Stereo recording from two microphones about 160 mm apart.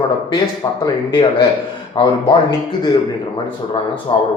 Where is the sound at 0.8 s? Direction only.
30° left (ahead or behind).